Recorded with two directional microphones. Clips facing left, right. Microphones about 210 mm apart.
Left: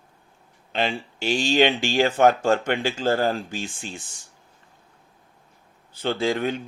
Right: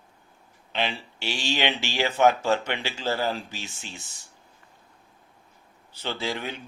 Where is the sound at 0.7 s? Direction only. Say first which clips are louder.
Left 4 dB; 45° left (ahead or behind).